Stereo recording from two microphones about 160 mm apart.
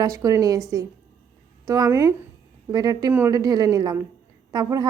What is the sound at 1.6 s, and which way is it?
Speech, 20° right (ahead or behind).